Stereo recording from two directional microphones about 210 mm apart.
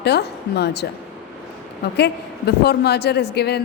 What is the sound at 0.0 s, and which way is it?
A woman's voice, 50° left (ahead or behind).